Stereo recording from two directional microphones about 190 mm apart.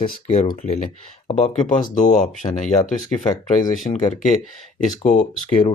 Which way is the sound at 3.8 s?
40° left (ahead or behind).